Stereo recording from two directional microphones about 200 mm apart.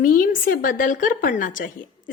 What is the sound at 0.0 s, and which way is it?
A woman's voice, 40° left (ahead or behind).